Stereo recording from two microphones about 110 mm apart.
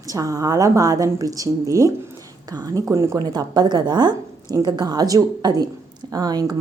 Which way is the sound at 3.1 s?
40° right (ahead or behind).